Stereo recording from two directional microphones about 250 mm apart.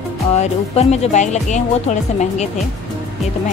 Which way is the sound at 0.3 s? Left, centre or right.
Left.